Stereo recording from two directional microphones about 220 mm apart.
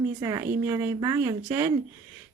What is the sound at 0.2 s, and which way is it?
Speech, 15° right (ahead or behind).